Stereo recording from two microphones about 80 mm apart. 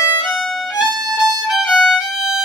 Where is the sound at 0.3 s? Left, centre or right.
Centre.